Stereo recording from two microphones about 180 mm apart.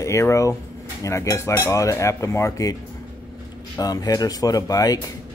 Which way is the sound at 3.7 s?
20° left (ahead or behind).